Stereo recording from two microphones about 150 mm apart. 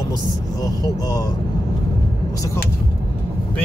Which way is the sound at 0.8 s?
25° left (ahead or behind).